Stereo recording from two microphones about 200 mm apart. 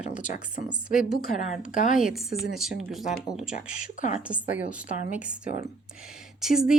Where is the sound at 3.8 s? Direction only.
40° left (ahead or behind).